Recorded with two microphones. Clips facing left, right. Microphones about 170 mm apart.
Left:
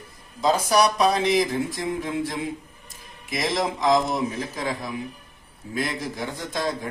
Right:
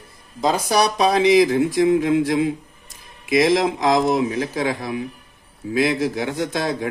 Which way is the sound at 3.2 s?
90° right.